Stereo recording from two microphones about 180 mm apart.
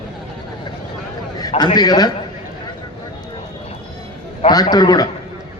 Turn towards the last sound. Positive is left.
turn(degrees=20)  # may be behind; listen again after turning